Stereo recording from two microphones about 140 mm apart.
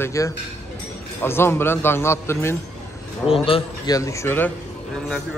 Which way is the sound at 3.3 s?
40° left (ahead or behind).